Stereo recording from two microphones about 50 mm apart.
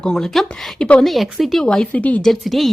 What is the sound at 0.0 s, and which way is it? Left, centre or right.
Speech, centre.